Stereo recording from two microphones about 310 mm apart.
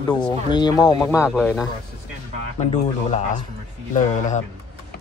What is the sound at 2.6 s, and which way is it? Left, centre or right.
Speech, left.